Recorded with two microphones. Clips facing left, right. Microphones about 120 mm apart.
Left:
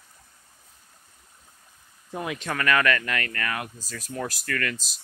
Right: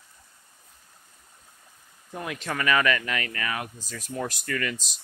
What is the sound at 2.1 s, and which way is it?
Speech, 15° left (ahead or behind).